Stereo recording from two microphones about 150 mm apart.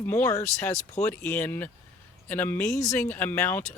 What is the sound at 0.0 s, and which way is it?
Speech, 15° left (ahead or behind).